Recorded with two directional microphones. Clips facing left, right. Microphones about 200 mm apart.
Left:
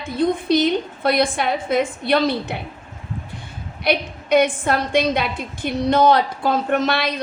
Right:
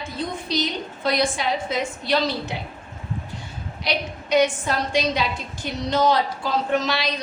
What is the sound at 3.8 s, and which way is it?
A woman's voice, 55° left (ahead or behind).